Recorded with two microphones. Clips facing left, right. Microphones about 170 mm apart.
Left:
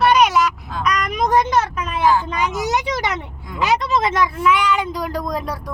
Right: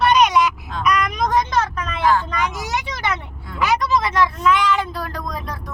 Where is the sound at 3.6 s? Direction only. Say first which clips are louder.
Left 1 dB; 25° left (ahead or behind).